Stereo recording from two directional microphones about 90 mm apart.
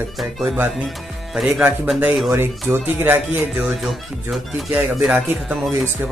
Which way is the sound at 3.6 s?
5° right (ahead or behind).